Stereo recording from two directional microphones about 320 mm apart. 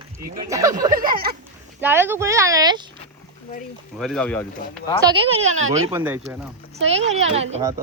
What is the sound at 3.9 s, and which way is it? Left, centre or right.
Speech, centre.